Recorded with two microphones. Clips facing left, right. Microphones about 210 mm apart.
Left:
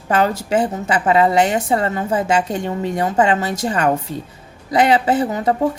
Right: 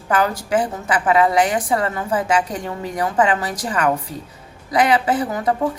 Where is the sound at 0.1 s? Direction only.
25° left (ahead or behind).